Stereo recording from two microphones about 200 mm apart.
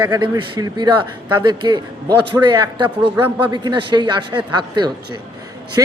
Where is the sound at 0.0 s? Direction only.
25° right (ahead or behind).